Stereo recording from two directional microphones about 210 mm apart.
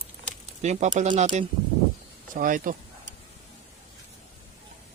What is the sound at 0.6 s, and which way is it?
Speech, 35° right (ahead or behind).